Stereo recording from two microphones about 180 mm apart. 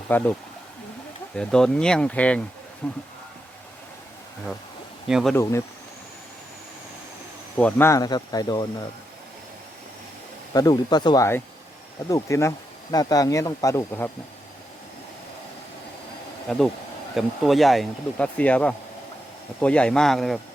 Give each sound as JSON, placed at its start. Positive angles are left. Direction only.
{"t": 0.1, "sound": "speech", "side_deg": 10}
{"t": 1.4, "sound": "speech", "side_deg": 5}
{"t": 5.0, "sound": "speech", "side_deg": -5}
{"t": 5.3, "sound": "speech", "side_deg": 15}
{"t": 7.5, "sound": "speech", "side_deg": 10}
{"t": 10.5, "sound": "speech", "side_deg": 20}
{"t": 16.5, "sound": "speech", "side_deg": 5}